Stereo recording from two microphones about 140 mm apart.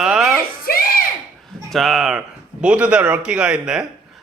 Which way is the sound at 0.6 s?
90° left.